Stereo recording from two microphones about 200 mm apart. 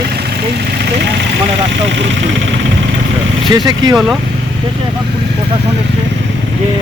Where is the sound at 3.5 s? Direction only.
20° right (ahead or behind).